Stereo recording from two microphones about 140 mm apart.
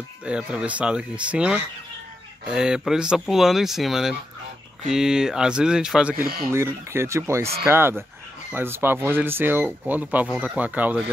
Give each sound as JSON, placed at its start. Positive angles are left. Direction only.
{"t": 0.2, "sound": "speech", "side_deg": -10}
{"t": 6.5, "sound": "speech", "side_deg": -20}